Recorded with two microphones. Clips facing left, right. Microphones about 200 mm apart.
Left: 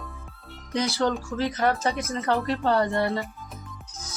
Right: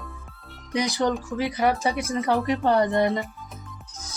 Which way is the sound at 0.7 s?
15° right (ahead or behind).